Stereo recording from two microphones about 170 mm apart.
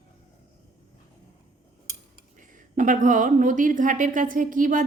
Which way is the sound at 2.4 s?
50° right (ahead or behind).